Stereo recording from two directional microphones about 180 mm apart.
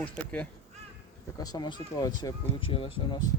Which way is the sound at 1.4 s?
25° left (ahead or behind).